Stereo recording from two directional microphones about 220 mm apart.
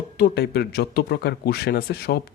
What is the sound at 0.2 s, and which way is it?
Speech, 45° left (ahead or behind).